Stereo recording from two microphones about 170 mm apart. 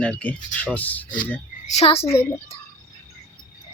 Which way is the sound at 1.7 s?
35° left (ahead or behind).